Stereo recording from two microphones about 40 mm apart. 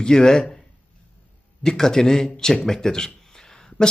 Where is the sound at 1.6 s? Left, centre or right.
Centre.